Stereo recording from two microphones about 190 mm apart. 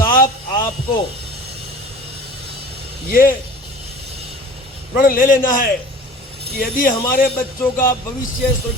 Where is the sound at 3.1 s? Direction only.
50° left (ahead or behind).